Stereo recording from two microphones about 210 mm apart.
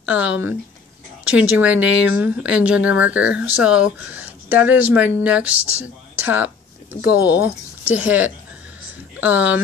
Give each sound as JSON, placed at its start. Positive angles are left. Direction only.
{"t": 0.0, "sound": "speech", "side_deg": -5}
{"t": 7.0, "sound": "speech", "side_deg": 50}
{"t": 7.2, "sound": "speech", "side_deg": -10}